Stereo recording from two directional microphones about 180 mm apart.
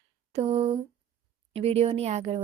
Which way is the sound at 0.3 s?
35° right (ahead or behind).